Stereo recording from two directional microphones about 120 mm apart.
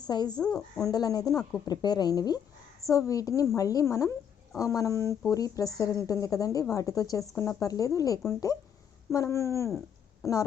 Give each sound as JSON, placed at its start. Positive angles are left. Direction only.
{"t": 0.1, "sound": "speech", "side_deg": 35}
{"t": 0.3, "sound": "speech", "side_deg": 5}
{"t": 0.8, "sound": "a woman's voice", "side_deg": 30}